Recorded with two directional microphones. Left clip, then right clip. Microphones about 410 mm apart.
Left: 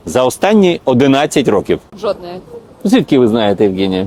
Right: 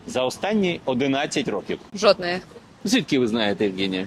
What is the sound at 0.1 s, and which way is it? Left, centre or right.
Speech, left.